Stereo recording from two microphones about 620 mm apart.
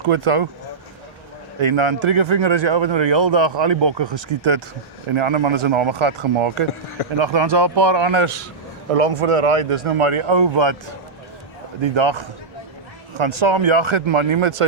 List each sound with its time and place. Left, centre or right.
0.1 s a man's voice: right
1.6 s a man's voice: right